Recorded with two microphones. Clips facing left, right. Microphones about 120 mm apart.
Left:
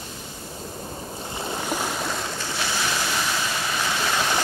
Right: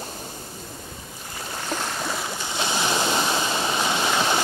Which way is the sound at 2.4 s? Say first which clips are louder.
Right 2 dB; 20° right (ahead or behind).